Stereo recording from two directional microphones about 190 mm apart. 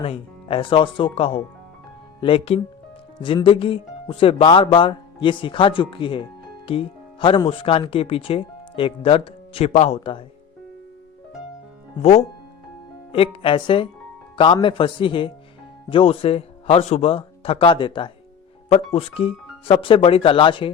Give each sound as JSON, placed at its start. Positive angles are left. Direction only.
{"t": 0.0, "sound": "speech", "side_deg": 30}
{"t": 13.1, "sound": "speech", "side_deg": 30}